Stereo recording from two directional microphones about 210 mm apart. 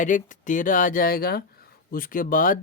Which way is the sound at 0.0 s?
40° left (ahead or behind).